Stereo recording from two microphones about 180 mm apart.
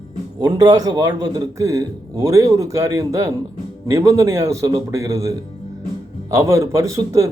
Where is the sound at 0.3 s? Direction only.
20° right (ahead or behind).